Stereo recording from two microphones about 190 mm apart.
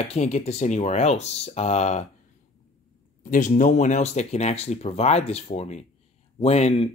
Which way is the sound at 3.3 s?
40° left (ahead or behind).